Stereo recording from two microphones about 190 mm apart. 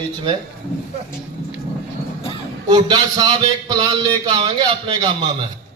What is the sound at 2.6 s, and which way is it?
Speech, 20° right (ahead or behind).